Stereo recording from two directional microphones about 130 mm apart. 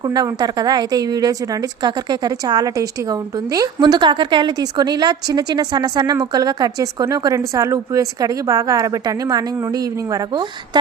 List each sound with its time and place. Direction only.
0.0 s a woman's voice: 30° right (ahead or behind)